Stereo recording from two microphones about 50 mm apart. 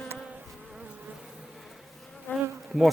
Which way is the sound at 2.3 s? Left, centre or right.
Left.